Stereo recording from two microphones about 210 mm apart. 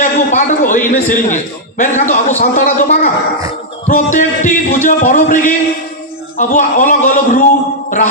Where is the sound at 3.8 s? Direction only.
35° left (ahead or behind).